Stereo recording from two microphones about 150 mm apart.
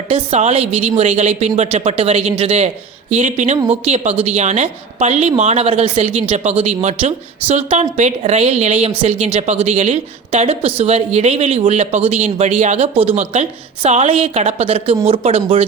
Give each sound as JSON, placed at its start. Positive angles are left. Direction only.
{"t": 0.1, "sound": "a woman's voice", "side_deg": -45}